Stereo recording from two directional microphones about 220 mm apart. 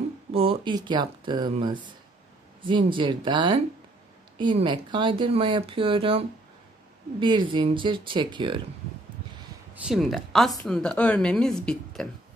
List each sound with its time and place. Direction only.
0.3 s speech: 25° right (ahead or behind)
9.8 s a woman's voice: centre (ahead or behind)